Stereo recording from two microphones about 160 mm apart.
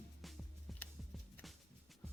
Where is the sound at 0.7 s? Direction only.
Centre (ahead or behind).